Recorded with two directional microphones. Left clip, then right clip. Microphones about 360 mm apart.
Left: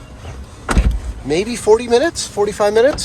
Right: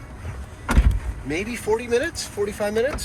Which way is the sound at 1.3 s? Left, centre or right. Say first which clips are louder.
Left 10 dB; centre.